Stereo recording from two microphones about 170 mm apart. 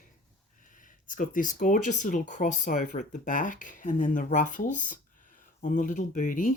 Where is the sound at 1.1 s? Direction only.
50° left (ahead or behind).